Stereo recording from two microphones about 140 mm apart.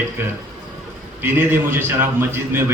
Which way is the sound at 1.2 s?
15° right (ahead or behind).